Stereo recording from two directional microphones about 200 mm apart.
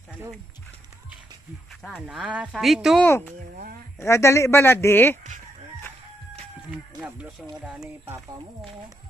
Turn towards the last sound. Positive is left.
turn(degrees=-5)  # may be behind; listen again after turning